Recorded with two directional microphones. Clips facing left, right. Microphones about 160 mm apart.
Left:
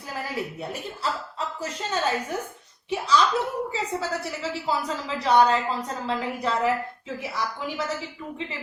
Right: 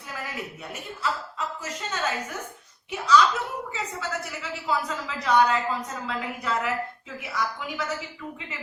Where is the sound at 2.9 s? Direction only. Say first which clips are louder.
Right 1 dB; 30° left (ahead or behind).